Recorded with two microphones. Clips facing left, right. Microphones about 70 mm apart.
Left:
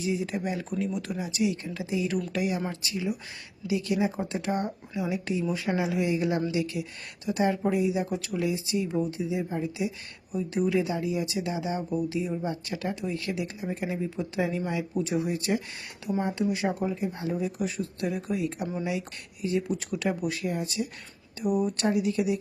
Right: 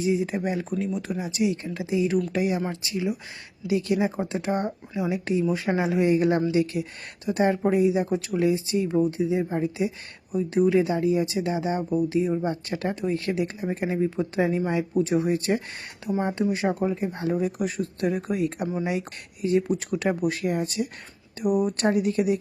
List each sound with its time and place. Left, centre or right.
0.0 s speech: right
17.1 s speech: right
21.4 s speech: centre
21.7 s speech: right